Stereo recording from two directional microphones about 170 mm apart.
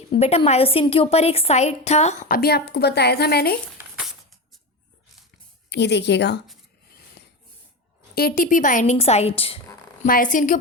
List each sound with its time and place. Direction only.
0.1 s a woman's voice: 35° left (ahead or behind); by 3.6 s 65° left (ahead or behind)
5.6 s speech: 90° left
8.1 s a woman's voice: 60° left (ahead or behind); by 9.6 s 35° left (ahead or behind)
10.0 s a woman's voice: 50° left (ahead or behind)